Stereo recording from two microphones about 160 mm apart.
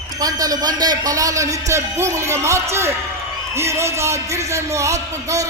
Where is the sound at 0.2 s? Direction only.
25° right (ahead or behind).